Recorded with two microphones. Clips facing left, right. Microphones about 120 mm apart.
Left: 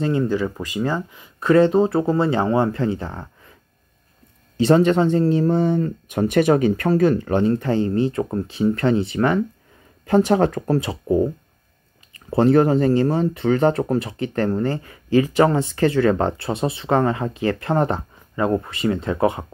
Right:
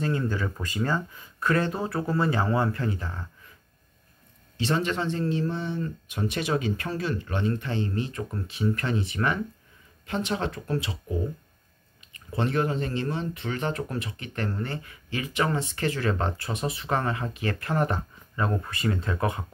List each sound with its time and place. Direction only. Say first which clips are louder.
0.0 s speech: left 8 dB; 20° left (ahead or behind)
4.6 s speech: left 11 dB; 40° left (ahead or behind)
10.1 s speech: left 12 dB; 45° left (ahead or behind); by 19.4 s 30° left (ahead or behind)